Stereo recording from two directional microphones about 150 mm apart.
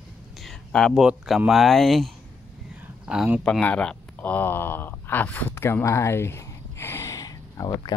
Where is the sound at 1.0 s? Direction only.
5° right (ahead or behind).